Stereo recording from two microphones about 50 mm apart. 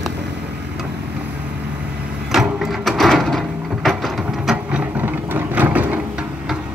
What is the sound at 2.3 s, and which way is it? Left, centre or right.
Printer, centre.